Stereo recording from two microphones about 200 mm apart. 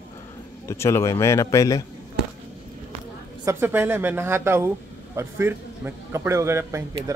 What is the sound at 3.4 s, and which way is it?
Speech, 15° right (ahead or behind).